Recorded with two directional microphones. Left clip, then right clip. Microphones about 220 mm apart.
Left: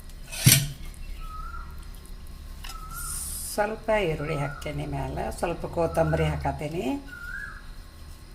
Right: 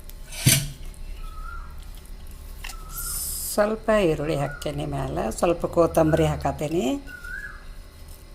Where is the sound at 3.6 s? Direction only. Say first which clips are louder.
Right 4 dB; 35° right (ahead or behind).